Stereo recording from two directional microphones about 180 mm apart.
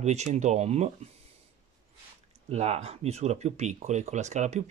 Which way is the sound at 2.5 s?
35° right (ahead or behind).